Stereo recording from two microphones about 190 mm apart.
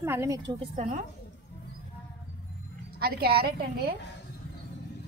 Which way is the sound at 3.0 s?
55° right (ahead or behind).